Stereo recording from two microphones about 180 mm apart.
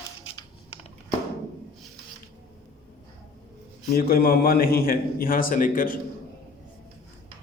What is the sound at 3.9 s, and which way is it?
Speech, 55° left (ahead or behind).